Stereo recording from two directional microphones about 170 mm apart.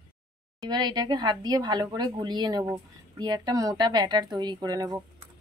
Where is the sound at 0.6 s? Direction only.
25° right (ahead or behind).